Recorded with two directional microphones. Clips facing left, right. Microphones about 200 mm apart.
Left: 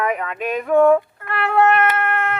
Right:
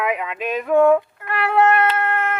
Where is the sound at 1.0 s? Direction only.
20° right (ahead or behind).